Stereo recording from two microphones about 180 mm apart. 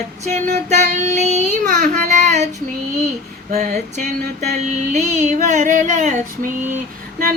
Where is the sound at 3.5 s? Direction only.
45° right (ahead or behind).